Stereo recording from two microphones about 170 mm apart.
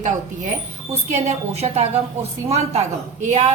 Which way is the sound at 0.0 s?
45° right (ahead or behind).